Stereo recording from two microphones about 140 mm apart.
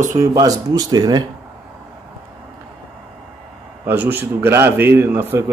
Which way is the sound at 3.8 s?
15° right (ahead or behind).